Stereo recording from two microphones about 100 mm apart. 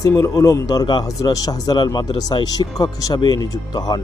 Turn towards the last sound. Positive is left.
turn(degrees=45)  # may be behind; listen again after turning